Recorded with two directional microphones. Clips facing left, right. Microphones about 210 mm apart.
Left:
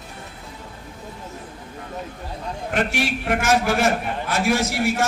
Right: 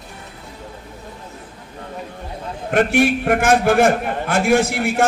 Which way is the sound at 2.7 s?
50° right (ahead or behind).